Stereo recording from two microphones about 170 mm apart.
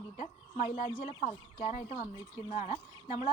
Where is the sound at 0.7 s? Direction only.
40° left (ahead or behind).